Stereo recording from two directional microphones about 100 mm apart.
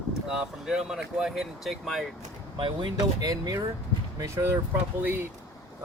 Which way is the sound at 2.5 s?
60° right (ahead or behind).